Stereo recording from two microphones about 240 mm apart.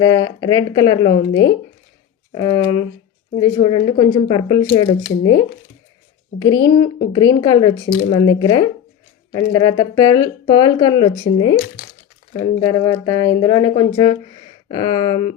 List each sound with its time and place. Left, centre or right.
0.0 s speech: centre
11.5 s speech: left
12.4 s speech: centre